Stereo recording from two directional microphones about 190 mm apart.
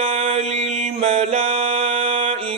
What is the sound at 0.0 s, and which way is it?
Mantra, 30° right (ahead or behind).